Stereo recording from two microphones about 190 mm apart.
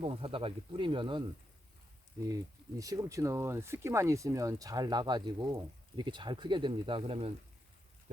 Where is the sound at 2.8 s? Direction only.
15° right (ahead or behind).